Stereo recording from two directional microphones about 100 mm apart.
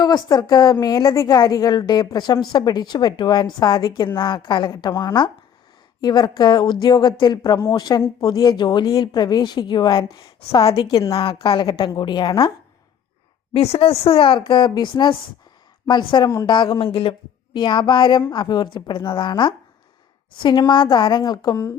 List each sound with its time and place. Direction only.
0.0 s a woman's voice: 40° left (ahead or behind)
11.1 s a woman's voice: 65° left (ahead or behind)
11.9 s speech: 50° left (ahead or behind)
13.5 s a woman's voice: 75° left (ahead or behind)
17.6 s speech: 50° left (ahead or behind)